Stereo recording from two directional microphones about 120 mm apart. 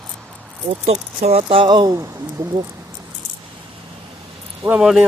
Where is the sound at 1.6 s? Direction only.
40° right (ahead or behind).